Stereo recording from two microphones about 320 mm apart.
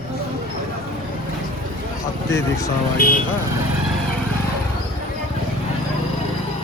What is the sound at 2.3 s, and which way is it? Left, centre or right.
Speech, centre.